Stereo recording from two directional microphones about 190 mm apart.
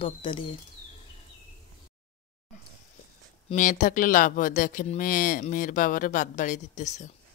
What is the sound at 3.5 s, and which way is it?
Speech, 40° left (ahead or behind).